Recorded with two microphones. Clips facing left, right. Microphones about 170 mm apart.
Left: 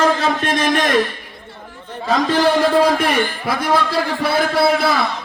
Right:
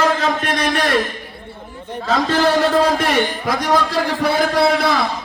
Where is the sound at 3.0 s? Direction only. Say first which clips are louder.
Even; 10° left (ahead or behind).